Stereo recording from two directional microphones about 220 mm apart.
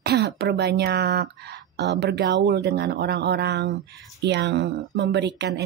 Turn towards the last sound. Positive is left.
turn(degrees=-50)  # may be behind; listen again after turning